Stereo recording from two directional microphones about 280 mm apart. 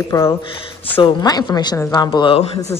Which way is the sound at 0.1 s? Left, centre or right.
Centre.